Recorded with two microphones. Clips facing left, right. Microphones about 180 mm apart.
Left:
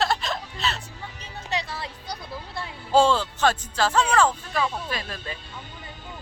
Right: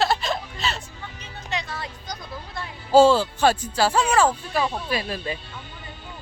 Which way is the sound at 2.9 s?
5° right (ahead or behind).